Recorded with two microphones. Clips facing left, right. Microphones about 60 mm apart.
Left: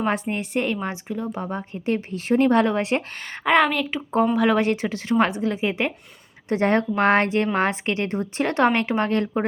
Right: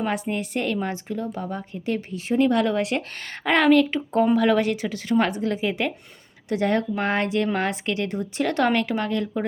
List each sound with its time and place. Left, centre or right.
0.1 s a woman's voice: left
2.1 s a woman's voice: left
3.2 s a woman's voice: centre
4.6 s a woman's voice: left
6.5 s a woman's voice: left